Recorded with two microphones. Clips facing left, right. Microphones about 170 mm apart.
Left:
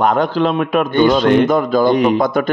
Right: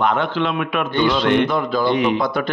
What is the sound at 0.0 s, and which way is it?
A man's voice, 40° left (ahead or behind).